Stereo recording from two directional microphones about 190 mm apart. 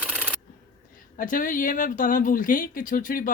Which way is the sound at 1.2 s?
45° left (ahead or behind).